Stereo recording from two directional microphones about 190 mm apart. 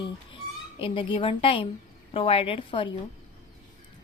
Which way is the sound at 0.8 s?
25° left (ahead or behind).